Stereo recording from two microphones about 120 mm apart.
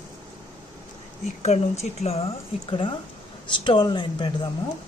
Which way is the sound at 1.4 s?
65° left (ahead or behind).